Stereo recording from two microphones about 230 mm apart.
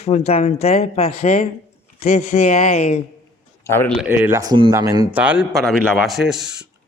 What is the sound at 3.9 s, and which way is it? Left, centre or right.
A man's voice, centre.